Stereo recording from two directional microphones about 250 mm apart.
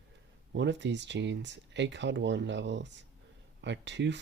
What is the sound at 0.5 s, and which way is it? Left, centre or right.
Speech, right.